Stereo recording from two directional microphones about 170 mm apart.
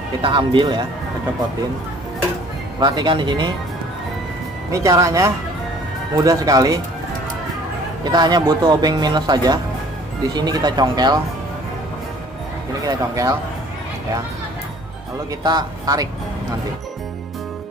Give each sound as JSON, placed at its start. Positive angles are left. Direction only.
{"t": 0.2, "sound": "a man's voice", "side_deg": -30}
{"t": 2.8, "sound": "a man's voice", "side_deg": -25}
{"t": 4.8, "sound": "a man's voice", "side_deg": -20}
{"t": 8.0, "sound": "a man's voice", "side_deg": -25}
{"t": 12.8, "sound": "a man's voice", "side_deg": -20}
{"t": 15.4, "sound": "a man's voice", "side_deg": -25}